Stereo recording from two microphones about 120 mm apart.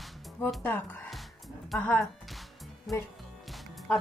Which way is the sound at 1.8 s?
10° left (ahead or behind).